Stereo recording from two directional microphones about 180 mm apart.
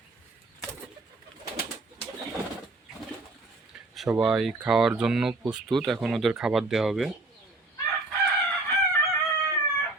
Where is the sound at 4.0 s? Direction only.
Centre (ahead or behind).